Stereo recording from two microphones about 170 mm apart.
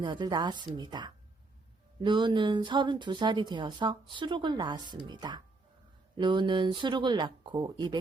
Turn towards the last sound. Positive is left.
turn(degrees=-25)  # may be behind; listen again after turning